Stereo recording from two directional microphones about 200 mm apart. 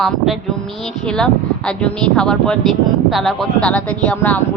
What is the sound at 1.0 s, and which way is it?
Speech, 5° left (ahead or behind).